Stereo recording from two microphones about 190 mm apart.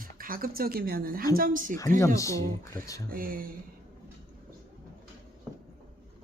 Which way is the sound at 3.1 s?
50° right (ahead or behind).